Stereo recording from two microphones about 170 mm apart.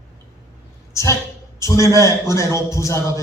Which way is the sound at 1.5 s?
15° left (ahead or behind).